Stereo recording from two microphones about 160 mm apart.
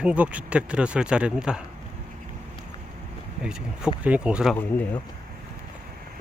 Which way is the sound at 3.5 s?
5° right (ahead or behind).